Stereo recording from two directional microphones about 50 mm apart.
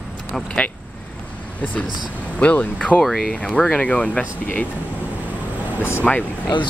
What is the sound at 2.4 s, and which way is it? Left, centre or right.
Speech, left.